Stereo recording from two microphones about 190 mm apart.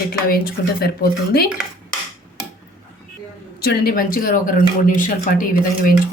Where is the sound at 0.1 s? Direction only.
50° left (ahead or behind).